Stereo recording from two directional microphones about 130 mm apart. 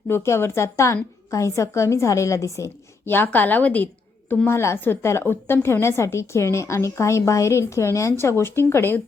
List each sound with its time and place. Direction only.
0.1 s a woman's voice: 20° left (ahead or behind)